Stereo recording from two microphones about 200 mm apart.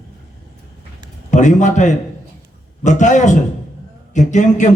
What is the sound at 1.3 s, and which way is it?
A man's voice, 35° left (ahead or behind).